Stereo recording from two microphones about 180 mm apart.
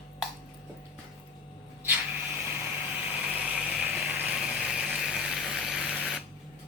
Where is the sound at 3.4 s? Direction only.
5° right (ahead or behind).